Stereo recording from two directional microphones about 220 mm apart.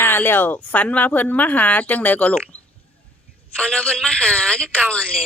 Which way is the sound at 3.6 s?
5° left (ahead or behind).